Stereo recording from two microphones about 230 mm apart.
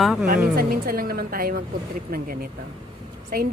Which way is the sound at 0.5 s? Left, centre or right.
Right.